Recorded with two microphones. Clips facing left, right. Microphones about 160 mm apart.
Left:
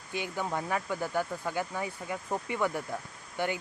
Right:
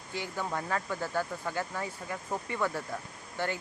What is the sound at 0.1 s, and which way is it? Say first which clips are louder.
Speech: left 2 dB; 15° left (ahead or behind).